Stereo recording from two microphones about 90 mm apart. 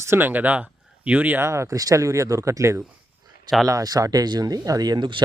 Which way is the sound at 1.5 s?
35° right (ahead or behind).